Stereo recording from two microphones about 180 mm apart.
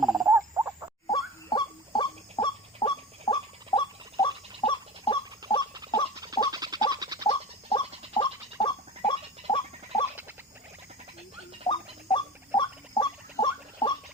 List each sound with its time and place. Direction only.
0.0 s frog: centre (ahead or behind)
0.3 s frog: 15° right (ahead or behind)
1.1 s bird: 25° left (ahead or behind)
5.4 s chicken: 20° right (ahead or behind)
6.1 s duck: 20° right (ahead or behind)
6.5 s a sound: 20° right (ahead or behind)
7.3 s a sound: 25° left (ahead or behind)
11.7 s rodents: 25° left (ahead or behind)